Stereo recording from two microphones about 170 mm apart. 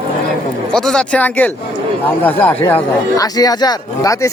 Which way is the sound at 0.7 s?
5° left (ahead or behind).